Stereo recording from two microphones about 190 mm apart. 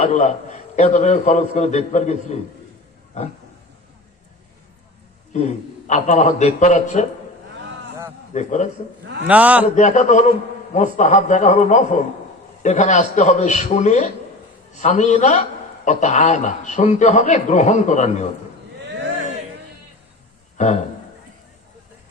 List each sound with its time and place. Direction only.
0.0 s a man's voice: 35° left (ahead or behind)
5.3 s a man's voice: 35° left (ahead or behind)
8.3 s a man's voice: 40° left (ahead or behind)
9.2 s a man's voice: 10° right (ahead or behind)
9.7 s a man's voice: 40° left (ahead or behind)
20.6 s a man's voice: 40° left (ahead or behind)